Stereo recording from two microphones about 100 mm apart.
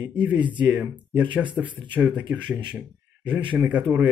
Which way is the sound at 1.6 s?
50° right (ahead or behind).